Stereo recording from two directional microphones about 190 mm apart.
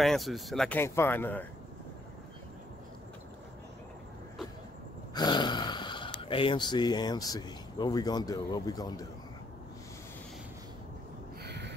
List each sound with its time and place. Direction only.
0.0 s speech: centre (ahead or behind)
5.1 s speech: 20° left (ahead or behind)
11.4 s a sound: 60° right (ahead or behind)